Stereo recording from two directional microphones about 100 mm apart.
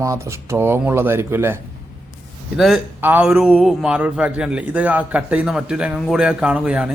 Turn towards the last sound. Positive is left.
turn(degrees=-10)  # may be behind; listen again after turning